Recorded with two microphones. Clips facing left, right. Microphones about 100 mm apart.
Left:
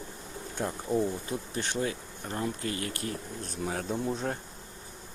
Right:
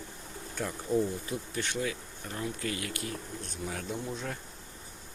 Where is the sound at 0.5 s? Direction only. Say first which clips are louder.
Left 1 dB; 20° left (ahead or behind).